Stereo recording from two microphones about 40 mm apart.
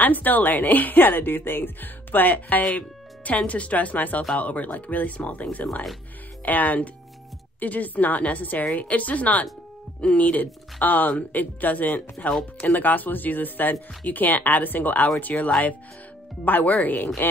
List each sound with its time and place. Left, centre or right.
0.0 s speech: left
2.3 s speech: left